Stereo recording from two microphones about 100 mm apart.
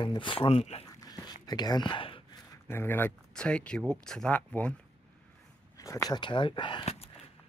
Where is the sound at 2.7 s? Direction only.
20° left (ahead or behind).